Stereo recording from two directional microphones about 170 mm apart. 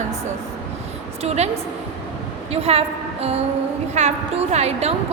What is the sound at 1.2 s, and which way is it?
Speech, 40° right (ahead or behind).